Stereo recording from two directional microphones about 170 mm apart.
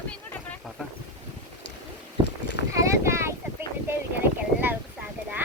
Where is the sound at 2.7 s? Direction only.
15° right (ahead or behind).